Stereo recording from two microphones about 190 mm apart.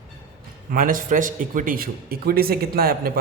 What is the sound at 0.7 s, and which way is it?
Speech, 45° right (ahead or behind).